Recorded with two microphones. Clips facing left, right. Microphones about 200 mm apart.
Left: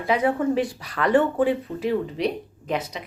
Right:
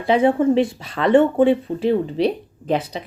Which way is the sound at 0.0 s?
30° right (ahead or behind).